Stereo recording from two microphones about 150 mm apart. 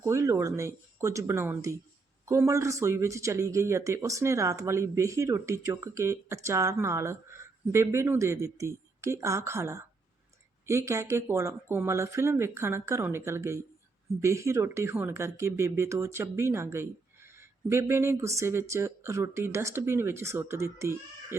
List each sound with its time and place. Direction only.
0.0 s a man's voice: 20° right (ahead or behind)